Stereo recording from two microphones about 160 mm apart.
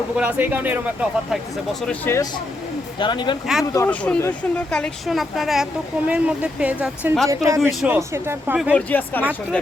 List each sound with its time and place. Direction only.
0.2 s speech: 10° right (ahead or behind)
1.9 s speech: 15° left (ahead or behind)
3.0 s speech: 30° left (ahead or behind)
3.4 s speech: centre (ahead or behind)
3.8 s speech: 10° left (ahead or behind); by 7.2 s 10° right (ahead or behind)
7.3 s speech: 20° right (ahead or behind)
7.7 s speech: centre (ahead or behind)
7.9 s speech: 15° right (ahead or behind)
8.7 s speech: 10° left (ahead or behind)